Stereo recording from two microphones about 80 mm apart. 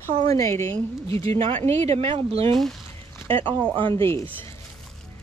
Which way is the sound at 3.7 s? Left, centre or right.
Right.